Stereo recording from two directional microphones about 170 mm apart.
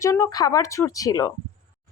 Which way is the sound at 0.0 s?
15° left (ahead or behind).